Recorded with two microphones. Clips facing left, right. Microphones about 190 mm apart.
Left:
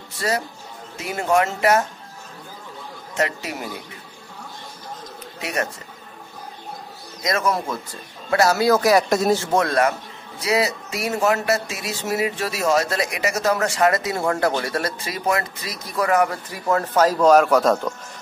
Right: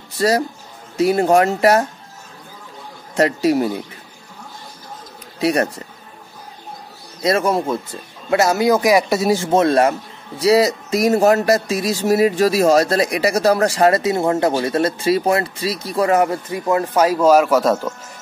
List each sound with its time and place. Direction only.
0.9 s speech: 35° right (ahead or behind)
3.2 s speech: 35° right (ahead or behind)
5.4 s speech: 35° right (ahead or behind)
7.2 s speech: 30° right (ahead or behind); by 9.4 s 5° right (ahead or behind)
9.4 s speech: 25° right (ahead or behind); by 17.9 s 5° right (ahead or behind)